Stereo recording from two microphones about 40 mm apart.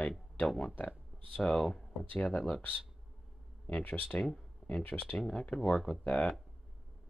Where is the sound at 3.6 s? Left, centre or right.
Left.